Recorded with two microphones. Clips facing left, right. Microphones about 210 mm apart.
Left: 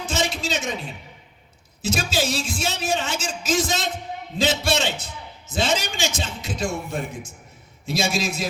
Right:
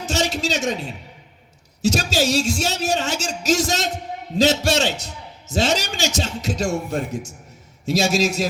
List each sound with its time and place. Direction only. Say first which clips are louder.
0.0 s a man's voice: right 3 dB; 40° right (ahead or behind)